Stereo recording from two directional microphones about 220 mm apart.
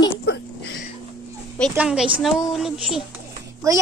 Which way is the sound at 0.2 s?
50° left (ahead or behind).